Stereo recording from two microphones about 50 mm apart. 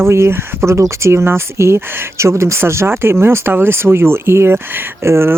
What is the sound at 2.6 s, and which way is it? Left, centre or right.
Speech, right.